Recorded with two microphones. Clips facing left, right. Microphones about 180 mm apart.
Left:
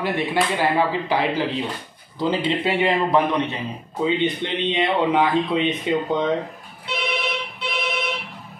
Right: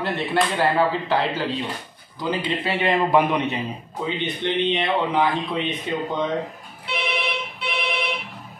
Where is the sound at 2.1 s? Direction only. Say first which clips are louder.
Left 3 dB; 25° left (ahead or behind).